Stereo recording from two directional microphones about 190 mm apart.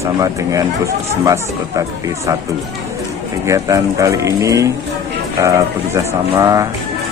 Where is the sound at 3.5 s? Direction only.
15° right (ahead or behind).